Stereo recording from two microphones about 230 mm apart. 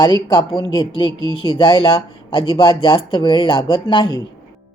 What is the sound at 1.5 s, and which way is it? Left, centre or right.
Speech, left.